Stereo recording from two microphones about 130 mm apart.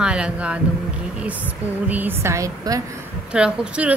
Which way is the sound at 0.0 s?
10° right (ahead or behind).